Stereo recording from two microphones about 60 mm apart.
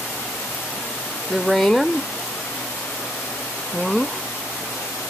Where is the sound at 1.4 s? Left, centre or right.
Centre.